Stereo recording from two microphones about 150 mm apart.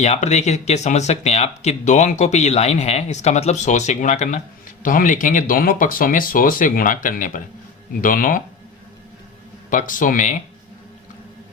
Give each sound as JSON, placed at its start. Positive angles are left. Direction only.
{"t": 0.0, "sound": "speech", "side_deg": 50}
{"t": 9.6, "sound": "speech", "side_deg": 60}